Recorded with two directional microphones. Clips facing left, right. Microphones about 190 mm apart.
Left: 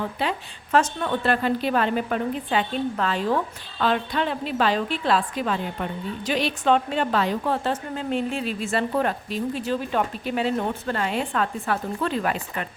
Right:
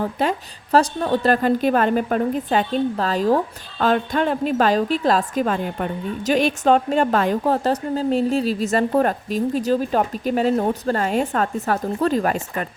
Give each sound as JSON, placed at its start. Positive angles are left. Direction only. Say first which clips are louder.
{"t": 0.0, "sound": "a woman's voice", "louder": "right 5 dB", "side_deg": -45}